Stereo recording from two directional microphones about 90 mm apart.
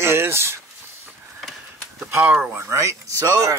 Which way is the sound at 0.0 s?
30° right (ahead or behind).